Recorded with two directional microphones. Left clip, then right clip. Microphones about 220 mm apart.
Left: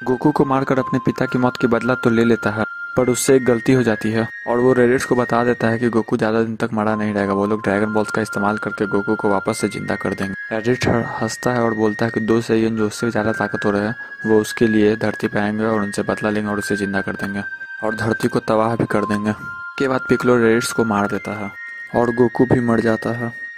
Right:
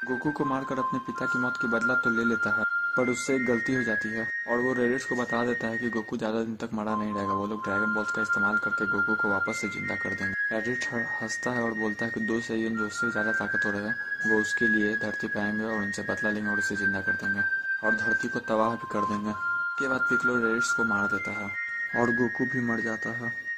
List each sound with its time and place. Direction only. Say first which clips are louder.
0.3 s speech: left 14 dB; 40° left (ahead or behind)